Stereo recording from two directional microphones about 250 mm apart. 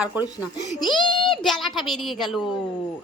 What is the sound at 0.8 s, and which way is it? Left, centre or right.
Speech, centre.